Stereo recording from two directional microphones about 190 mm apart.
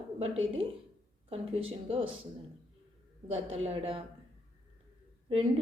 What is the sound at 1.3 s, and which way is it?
Speech, 30° right (ahead or behind).